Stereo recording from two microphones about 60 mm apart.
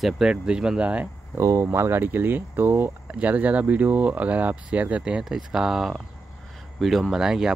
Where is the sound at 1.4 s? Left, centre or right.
Right.